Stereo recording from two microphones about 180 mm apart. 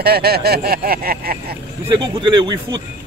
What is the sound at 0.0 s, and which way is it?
Speech, 60° right (ahead or behind).